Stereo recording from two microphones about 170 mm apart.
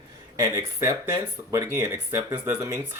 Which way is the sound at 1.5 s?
20° right (ahead or behind).